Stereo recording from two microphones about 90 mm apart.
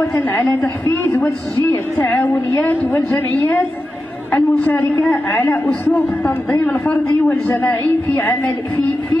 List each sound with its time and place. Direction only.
0.0 s a man's voice: 25° left (ahead or behind)